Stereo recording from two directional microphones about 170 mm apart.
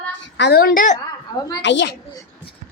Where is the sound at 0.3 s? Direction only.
80° left; by 0.9 s 50° left (ahead or behind).